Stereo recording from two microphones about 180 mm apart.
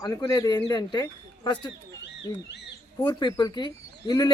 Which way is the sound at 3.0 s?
25° left (ahead or behind).